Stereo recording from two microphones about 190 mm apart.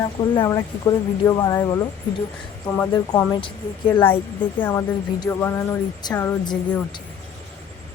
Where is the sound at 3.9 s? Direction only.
10° left (ahead or behind).